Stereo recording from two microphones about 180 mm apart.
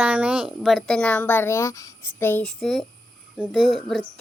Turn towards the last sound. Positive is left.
turn(degrees=0)  # may be behind; listen again after turning